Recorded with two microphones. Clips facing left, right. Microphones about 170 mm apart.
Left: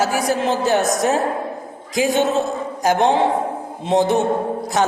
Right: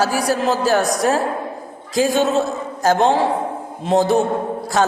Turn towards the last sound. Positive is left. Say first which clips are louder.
# right 1 dB
turn(degrees=20)  # may be behind; listen again after turning